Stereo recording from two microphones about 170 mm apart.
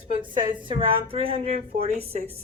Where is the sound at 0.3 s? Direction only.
30° right (ahead or behind).